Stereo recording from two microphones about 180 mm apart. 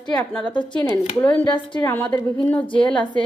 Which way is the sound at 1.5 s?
25° left (ahead or behind).